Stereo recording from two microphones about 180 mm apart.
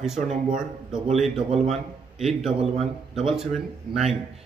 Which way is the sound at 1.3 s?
35° right (ahead or behind).